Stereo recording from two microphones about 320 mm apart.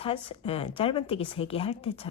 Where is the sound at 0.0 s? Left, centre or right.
Centre.